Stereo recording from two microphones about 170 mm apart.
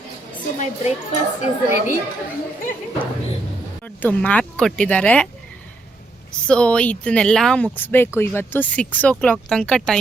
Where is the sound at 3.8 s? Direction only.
10° left (ahead or behind).